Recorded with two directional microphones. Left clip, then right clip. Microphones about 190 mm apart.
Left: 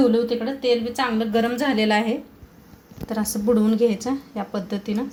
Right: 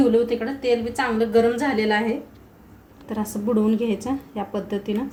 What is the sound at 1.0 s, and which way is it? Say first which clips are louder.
A woman's voice: right 3 dB; 40° left (ahead or behind).